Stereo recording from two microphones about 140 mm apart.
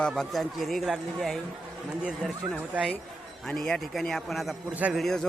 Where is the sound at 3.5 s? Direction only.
5° left (ahead or behind).